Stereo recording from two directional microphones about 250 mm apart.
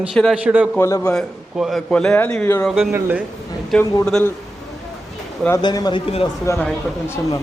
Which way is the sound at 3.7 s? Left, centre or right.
Centre.